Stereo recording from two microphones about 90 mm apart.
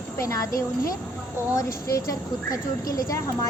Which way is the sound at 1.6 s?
40° left (ahead or behind).